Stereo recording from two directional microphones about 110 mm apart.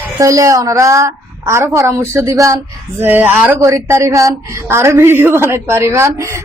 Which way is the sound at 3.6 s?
30° right (ahead or behind).